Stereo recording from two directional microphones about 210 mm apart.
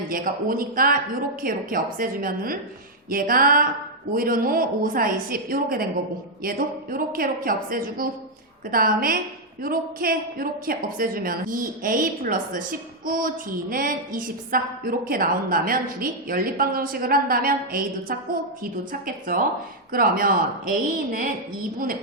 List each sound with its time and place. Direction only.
0.1 s a woman's voice: 40° right (ahead or behind)